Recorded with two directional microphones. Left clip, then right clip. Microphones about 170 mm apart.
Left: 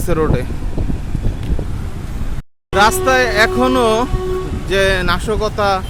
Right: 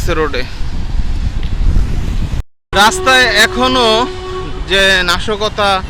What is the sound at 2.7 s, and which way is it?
Speech, 10° left (ahead or behind).